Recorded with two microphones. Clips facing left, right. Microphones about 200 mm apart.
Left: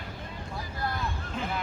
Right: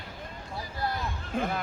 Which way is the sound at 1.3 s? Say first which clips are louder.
Right 6 dB; 55° right (ahead or behind).